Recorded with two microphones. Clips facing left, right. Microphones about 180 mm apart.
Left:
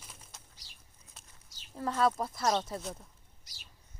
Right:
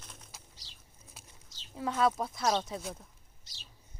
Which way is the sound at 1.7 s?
Centre (ahead or behind).